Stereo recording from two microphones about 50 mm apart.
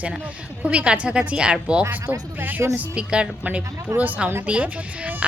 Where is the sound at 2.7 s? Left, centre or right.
Right.